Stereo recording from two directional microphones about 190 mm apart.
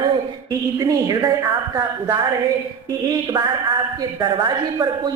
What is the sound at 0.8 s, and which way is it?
A woman's voice, 20° right (ahead or behind).